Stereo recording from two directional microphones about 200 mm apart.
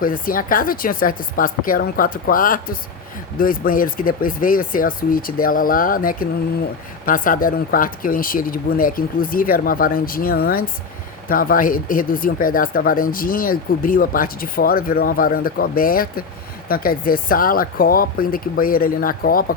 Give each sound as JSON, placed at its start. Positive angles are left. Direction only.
{"t": 0.0, "sound": "speech", "side_deg": 45}